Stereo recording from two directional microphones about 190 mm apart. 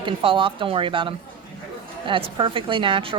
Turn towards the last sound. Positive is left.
turn(degrees=-25)  # may be behind; listen again after turning